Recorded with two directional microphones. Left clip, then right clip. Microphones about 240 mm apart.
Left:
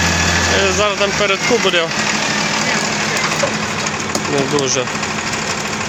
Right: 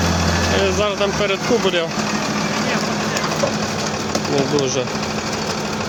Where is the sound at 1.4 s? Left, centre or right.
Right.